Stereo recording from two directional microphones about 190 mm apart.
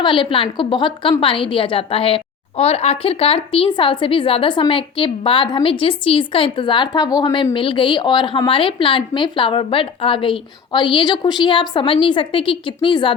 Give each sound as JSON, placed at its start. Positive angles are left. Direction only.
{"t": 0.0, "sound": "a woman's voice", "side_deg": 25}